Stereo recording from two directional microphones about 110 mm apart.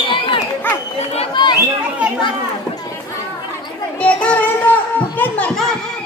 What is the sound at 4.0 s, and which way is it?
Child singing, 10° left (ahead or behind).